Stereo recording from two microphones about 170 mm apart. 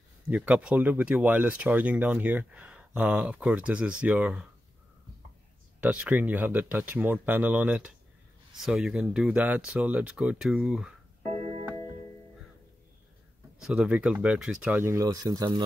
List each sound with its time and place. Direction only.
0.3 s speech: 10° right (ahead or behind)
5.8 s speech: 5° right (ahead or behind)
11.2 s keyboard: 35° right (ahead or behind)
13.6 s speech: 5° right (ahead or behind); by 15.6 s 20° right (ahead or behind)